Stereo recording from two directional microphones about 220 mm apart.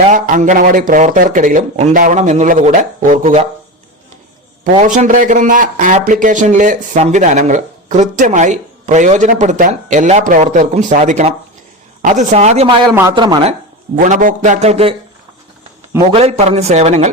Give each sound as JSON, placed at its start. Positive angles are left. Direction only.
{"t": 0.1, "sound": "speech", "side_deg": -35}
{"t": 4.7, "sound": "a man's voice", "side_deg": -30}
{"t": 16.1, "sound": "a man's voice", "side_deg": -25}